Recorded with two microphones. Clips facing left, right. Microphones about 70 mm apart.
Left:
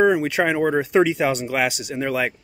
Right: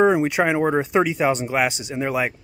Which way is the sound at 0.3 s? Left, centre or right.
Centre.